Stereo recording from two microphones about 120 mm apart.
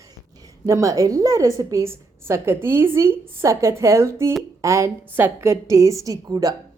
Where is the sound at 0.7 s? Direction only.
25° right (ahead or behind).